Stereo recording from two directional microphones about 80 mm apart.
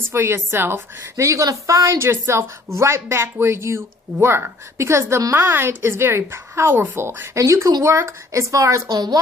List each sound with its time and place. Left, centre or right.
0.1 s a woman's voice: right
7.3 s a woman's voice: right
9.0 s a woman's voice: right